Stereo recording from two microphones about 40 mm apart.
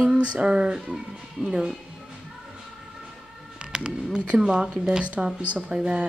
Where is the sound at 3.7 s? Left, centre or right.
Centre.